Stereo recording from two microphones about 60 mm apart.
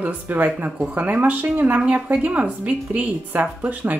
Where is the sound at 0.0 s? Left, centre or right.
Right.